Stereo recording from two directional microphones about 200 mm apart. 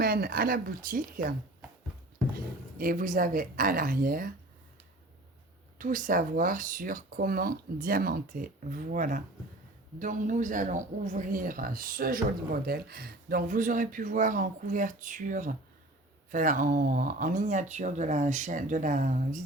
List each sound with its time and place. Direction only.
0.0 s speech: 50° right (ahead or behind)
2.7 s speech: 45° right (ahead or behind)
5.8 s speech: 40° right (ahead or behind)